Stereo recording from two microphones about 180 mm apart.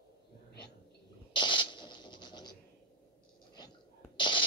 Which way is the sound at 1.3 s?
25° left (ahead or behind).